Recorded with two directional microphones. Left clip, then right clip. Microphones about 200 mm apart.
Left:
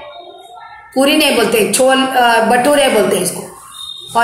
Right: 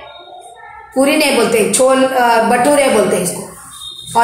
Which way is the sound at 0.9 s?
25° left (ahead or behind).